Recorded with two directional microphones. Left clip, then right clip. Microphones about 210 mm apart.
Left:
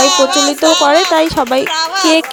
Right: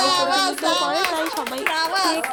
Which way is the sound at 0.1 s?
Centre (ahead or behind).